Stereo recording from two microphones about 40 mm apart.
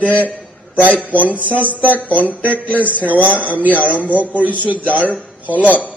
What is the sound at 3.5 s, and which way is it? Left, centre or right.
Speech, left.